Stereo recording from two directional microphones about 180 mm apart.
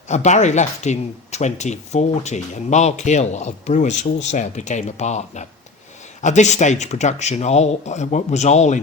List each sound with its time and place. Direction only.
0.1 s speech: 40° left (ahead or behind)